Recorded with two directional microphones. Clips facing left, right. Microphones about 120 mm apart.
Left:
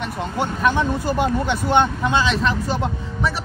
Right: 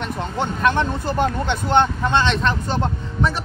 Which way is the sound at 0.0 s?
5° left (ahead or behind).